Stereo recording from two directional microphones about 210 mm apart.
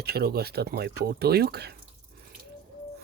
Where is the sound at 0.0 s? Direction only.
50° right (ahead or behind).